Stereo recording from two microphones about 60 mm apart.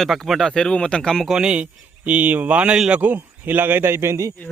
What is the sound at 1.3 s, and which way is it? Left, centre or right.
Speech, centre.